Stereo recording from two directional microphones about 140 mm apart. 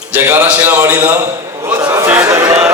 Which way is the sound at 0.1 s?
15° right (ahead or behind).